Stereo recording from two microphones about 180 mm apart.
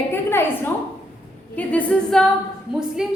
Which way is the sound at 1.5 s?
10° left (ahead or behind).